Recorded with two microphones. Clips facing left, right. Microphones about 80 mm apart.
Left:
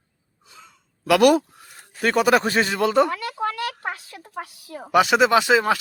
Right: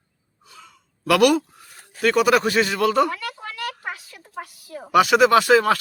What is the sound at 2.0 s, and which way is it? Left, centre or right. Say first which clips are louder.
A man's voice: right 1 dB; left.